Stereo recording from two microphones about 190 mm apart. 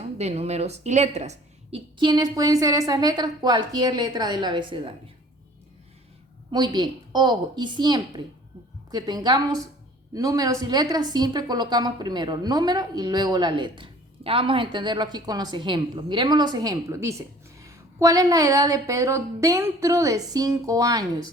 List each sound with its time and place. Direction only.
0.0 s a woman's voice: 35° right (ahead or behind)
2.0 s a woman's voice: 20° right (ahead or behind)
6.5 s a woman's voice: 20° right (ahead or behind)